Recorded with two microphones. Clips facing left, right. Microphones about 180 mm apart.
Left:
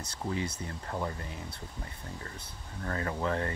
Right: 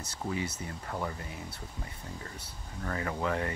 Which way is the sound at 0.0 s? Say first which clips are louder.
Even; 10° right (ahead or behind).